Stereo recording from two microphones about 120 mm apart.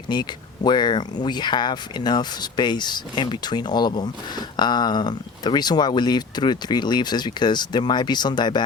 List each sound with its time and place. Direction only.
0.1 s speech: 35° left (ahead or behind)